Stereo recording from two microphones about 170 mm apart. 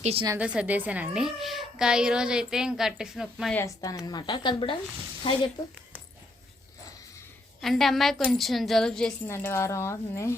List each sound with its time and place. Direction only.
0.0 s a woman's voice: 35° right (ahead or behind)
0.3 s speech: 5° right (ahead or behind)
3.5 s speech: 15° left (ahead or behind)
7.6 s speech: centre (ahead or behind)
9.2 s speech: 15° left (ahead or behind)